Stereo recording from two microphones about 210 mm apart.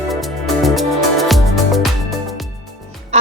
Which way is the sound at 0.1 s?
Centre (ahead or behind).